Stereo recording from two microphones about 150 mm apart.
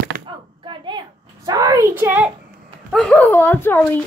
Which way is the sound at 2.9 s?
5° left (ahead or behind).